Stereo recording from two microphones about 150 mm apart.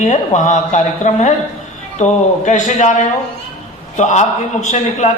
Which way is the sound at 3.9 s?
50° left (ahead or behind).